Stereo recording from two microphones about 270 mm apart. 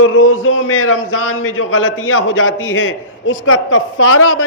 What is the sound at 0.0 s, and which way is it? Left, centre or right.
A man's voice, left.